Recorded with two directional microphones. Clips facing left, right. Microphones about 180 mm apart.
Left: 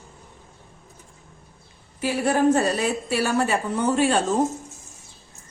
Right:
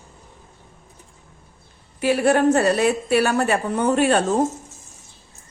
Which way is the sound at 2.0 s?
65° right (ahead or behind).